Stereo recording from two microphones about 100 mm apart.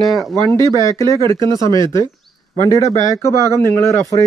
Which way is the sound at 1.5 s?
50° right (ahead or behind).